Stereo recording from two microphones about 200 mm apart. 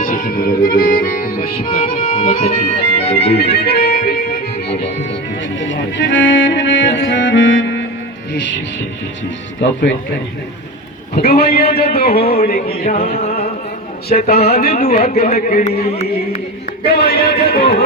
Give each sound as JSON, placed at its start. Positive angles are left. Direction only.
{"t": 0.0, "sound": "music", "side_deg": 45}
{"t": 1.7, "sound": "speech", "side_deg": 40}
{"t": 3.3, "sound": "music", "side_deg": 55}
{"t": 4.8, "sound": "speech", "side_deg": 65}
{"t": 11.1, "sound": "music", "side_deg": 50}
{"t": 13.1, "sound": "music", "side_deg": 30}
{"t": 14.3, "sound": "speech", "side_deg": 30}
{"t": 17.0, "sound": "music", "side_deg": 50}